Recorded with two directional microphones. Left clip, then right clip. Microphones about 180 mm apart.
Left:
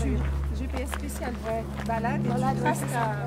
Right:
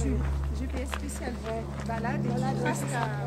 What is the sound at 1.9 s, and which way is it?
Vehicle, 45° left (ahead or behind).